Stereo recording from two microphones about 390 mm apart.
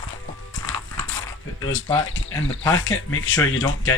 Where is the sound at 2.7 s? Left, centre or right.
Left.